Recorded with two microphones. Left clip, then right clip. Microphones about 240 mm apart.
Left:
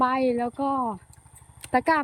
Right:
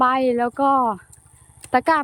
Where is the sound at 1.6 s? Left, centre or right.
Centre.